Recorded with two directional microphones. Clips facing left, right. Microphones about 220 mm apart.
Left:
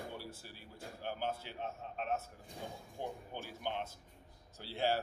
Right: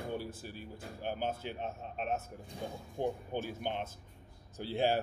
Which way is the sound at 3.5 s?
20° right (ahead or behind).